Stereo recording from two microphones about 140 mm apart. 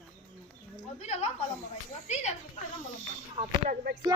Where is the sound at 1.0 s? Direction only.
50° left (ahead or behind).